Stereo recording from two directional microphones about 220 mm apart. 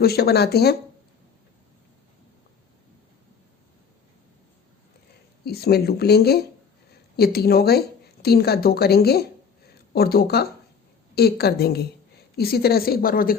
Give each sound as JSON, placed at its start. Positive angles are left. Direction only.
{"t": 0.0, "sound": "a woman's voice", "side_deg": 45}
{"t": 5.5, "sound": "a woman's voice", "side_deg": 45}